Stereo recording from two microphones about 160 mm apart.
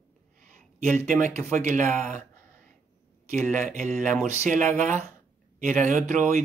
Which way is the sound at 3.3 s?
55° right (ahead or behind).